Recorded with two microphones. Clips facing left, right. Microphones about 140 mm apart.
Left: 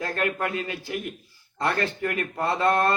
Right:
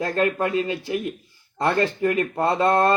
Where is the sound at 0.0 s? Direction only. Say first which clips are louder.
Right 5 dB; 25° right (ahead or behind).